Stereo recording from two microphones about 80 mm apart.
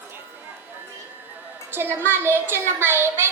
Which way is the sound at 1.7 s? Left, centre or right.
Right.